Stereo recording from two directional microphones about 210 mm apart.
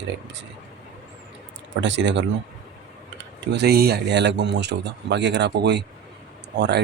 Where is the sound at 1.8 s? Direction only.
60° right (ahead or behind).